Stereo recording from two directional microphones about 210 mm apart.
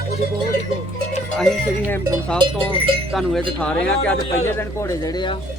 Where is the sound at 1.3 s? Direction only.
5° left (ahead or behind).